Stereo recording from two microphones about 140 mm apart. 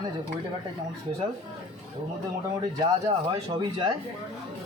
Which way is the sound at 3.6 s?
30° right (ahead or behind).